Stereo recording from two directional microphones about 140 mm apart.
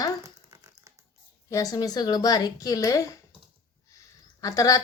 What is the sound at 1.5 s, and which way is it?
A woman's voice, 25° left (ahead or behind).